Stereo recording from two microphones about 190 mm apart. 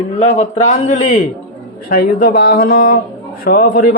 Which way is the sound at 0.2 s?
35° left (ahead or behind).